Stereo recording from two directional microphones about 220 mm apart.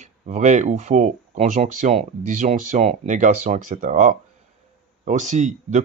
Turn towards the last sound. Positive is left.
turn(degrees=-35)  # may be behind; listen again after turning